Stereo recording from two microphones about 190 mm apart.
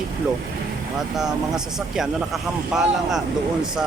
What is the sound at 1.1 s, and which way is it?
Speech, centre (ahead or behind).